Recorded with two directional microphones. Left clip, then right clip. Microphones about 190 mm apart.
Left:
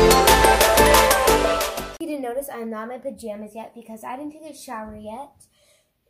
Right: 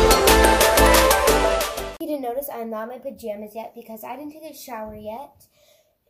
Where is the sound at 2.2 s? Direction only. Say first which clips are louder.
Left 2 dB; 20° left (ahead or behind).